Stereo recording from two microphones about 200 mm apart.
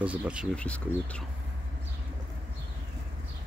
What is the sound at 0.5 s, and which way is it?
Speech, 5° left (ahead or behind).